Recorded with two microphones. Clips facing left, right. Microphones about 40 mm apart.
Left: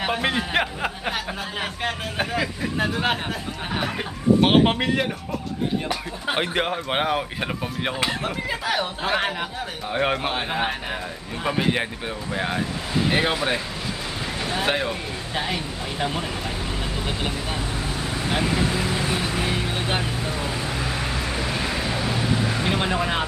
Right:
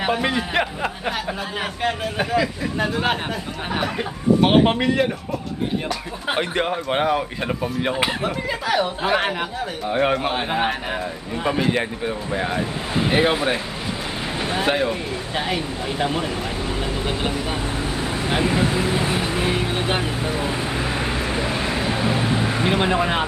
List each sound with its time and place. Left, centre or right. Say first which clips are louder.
0.1 s a man's voice: right 1 dB; centre
4.4 s a man's voice: right 2 dB; centre
6.4 s a man's voice: right 2 dB; centre
11.4 s a man's voice: right 2 dB; centre
14.3 s a sound: right 3 dB; centre
14.6 s a man's voice: right 3 dB; centre
15.4 s vehicle: right 2 dB; centre